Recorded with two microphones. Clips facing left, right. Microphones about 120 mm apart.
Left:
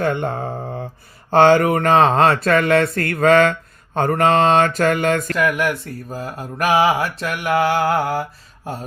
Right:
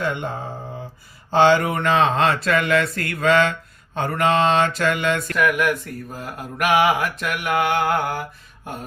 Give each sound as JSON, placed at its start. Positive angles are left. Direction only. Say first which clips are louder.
{"t": 0.0, "sound": "speech", "louder": "left 5 dB", "side_deg": 55}
{"t": 2.7, "sound": "mantra", "louder": "left 4 dB", "side_deg": 30}
{"t": 3.0, "sound": "speech", "louder": "left 5 dB", "side_deg": 55}
{"t": 3.9, "sound": "mantra", "louder": "left 4 dB", "side_deg": 45}